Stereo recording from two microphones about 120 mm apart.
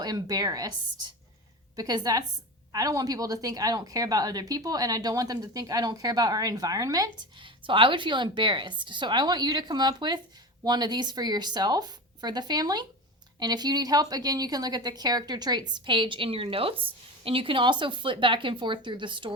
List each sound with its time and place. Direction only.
0.0 s a woman's voice: 30° right (ahead or behind)
1.7 s a woman's voice: 30° right (ahead or behind)